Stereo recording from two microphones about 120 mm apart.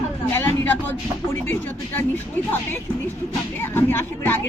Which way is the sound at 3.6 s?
20° left (ahead or behind).